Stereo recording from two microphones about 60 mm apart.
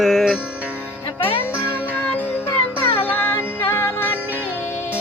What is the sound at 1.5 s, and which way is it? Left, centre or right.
Music, right.